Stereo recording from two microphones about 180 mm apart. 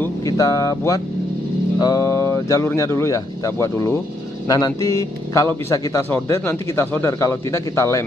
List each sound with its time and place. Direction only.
0.0 s a man's voice: 20° left (ahead or behind)